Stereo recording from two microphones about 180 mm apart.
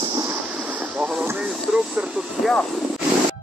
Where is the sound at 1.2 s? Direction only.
10° right (ahead or behind).